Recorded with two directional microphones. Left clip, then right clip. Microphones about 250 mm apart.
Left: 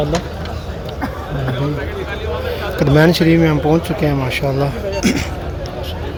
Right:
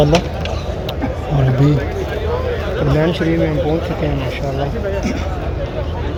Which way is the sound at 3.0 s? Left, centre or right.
Left.